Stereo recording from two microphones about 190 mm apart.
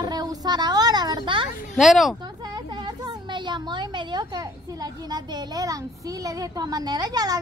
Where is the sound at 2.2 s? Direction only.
20° right (ahead or behind).